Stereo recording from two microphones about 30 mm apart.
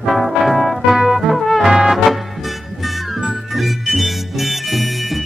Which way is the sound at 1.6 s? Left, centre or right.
Centre.